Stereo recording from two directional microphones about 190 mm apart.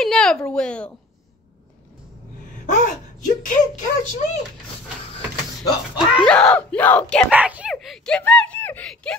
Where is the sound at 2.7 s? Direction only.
40° left (ahead or behind).